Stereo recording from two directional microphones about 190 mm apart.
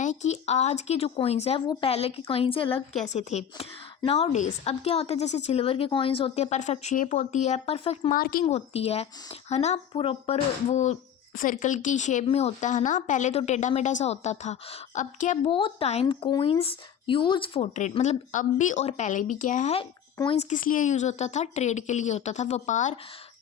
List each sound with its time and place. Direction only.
0.0 s speech: 40° left (ahead or behind)
8.1 s a woman's voice: 50° left (ahead or behind)
8.4 s speech: 35° left (ahead or behind)
15.4 s speech: 25° left (ahead or behind)